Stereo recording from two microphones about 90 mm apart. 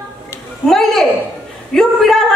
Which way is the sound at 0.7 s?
5° left (ahead or behind).